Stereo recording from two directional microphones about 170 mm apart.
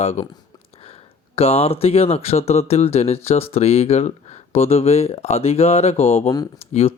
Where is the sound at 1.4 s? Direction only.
35° left (ahead or behind).